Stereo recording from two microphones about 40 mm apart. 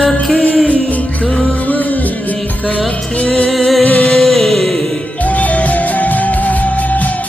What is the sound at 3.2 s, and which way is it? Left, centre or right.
Music, left.